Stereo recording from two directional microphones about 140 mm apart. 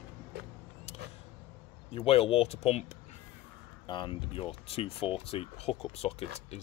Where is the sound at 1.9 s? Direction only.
45° left (ahead or behind).